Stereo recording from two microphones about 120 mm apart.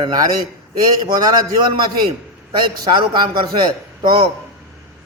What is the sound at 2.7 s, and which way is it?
Speech, 35° right (ahead or behind).